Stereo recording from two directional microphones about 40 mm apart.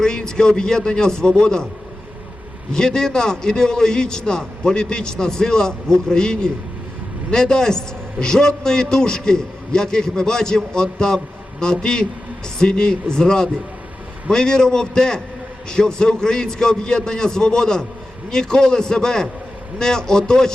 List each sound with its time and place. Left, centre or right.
0.0 s a man's voice: centre
2.7 s a man's voice: centre